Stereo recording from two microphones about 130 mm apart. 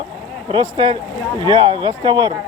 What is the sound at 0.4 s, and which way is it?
Speech, 35° right (ahead or behind).